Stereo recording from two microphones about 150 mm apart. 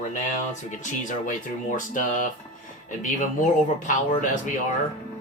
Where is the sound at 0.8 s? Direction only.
60° left (ahead or behind).